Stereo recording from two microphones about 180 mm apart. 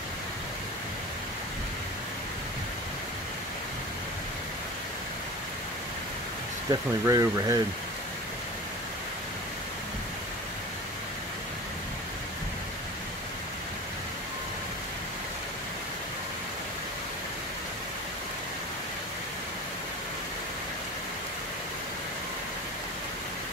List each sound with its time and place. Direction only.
6.7 s speech: 20° right (ahead or behind)